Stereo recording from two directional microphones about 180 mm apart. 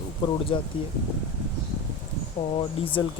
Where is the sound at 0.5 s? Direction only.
30° left (ahead or behind).